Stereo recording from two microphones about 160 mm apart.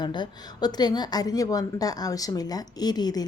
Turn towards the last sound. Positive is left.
turn(degrees=25)  # may be behind; listen again after turning